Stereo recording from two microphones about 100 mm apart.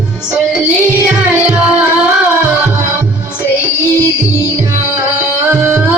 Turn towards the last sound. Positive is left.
turn(degrees=-25)  # may be behind; listen again after turning